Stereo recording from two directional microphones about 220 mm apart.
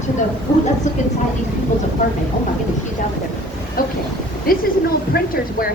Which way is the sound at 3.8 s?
40° left (ahead or behind).